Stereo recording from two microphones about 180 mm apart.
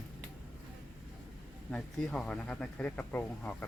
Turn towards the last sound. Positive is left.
turn(degrees=10)  # may be behind; listen again after turning